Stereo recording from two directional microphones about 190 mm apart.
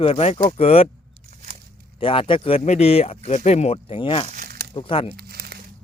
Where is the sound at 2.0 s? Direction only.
25° left (ahead or behind).